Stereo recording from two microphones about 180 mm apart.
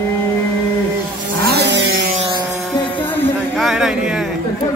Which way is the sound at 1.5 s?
70° right (ahead or behind).